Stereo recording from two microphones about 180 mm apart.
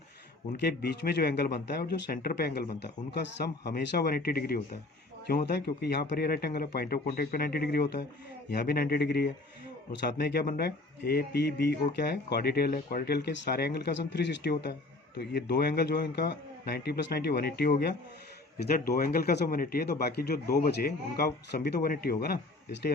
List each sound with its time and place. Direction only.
0.6 s speech: 65° left (ahead or behind)
3.1 s a man's voice: 70° left (ahead or behind)
21.8 s speech: 55° left (ahead or behind)